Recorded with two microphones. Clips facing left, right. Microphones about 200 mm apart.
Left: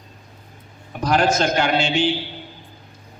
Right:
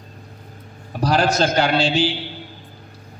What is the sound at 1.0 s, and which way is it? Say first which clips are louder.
A man's voice: even; 35° right (ahead or behind).